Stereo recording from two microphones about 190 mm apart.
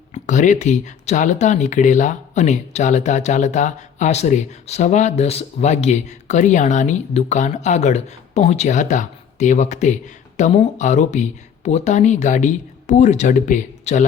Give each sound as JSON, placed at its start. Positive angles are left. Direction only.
{"t": 0.1, "sound": "speech", "side_deg": 40}